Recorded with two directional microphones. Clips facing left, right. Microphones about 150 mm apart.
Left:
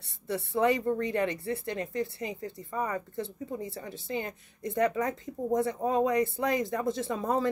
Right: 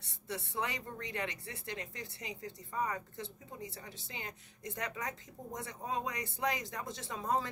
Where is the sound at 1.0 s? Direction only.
50° left (ahead or behind).